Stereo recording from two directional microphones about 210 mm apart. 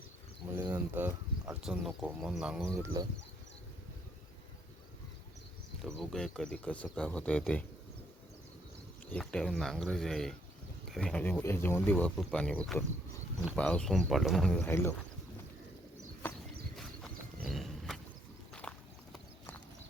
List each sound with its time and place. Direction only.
0.5 s speech: 10° right (ahead or behind)
3.0 s speech: 15° right (ahead or behind)
5.8 s speech: centre (ahead or behind)
9.1 s speech: 5° left (ahead or behind)
16.7 s wild animals: centre (ahead or behind)
18.6 s clip-clop: 5° left (ahead or behind)